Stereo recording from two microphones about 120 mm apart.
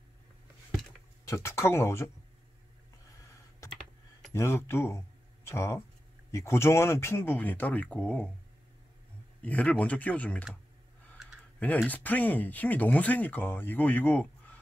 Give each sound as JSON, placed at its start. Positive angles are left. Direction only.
{"t": 1.2, "sound": "speech", "side_deg": 20}
{"t": 3.6, "sound": "computer keyboard", "side_deg": 25}
{"t": 4.3, "sound": "speech", "side_deg": 20}
{"t": 9.4, "sound": "speech", "side_deg": 10}
{"t": 11.2, "sound": "typing", "side_deg": -5}
{"t": 11.9, "sound": "speech", "side_deg": 15}